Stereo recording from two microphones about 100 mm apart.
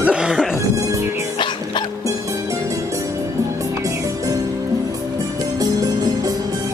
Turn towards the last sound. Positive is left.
turn(degrees=-40)  # may be behind; listen again after turning